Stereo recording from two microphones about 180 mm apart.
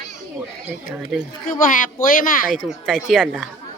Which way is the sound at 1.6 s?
50° left (ahead or behind).